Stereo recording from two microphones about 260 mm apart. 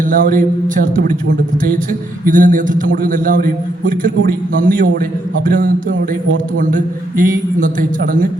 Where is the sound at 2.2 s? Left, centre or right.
Right.